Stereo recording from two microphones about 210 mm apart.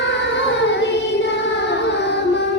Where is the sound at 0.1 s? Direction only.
55° left (ahead or behind).